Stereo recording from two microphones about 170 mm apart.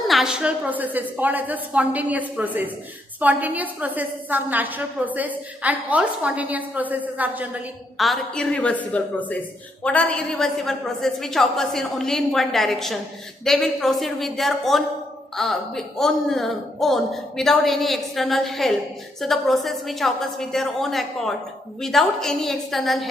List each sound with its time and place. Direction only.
0.1 s a woman's voice: centre (ahead or behind)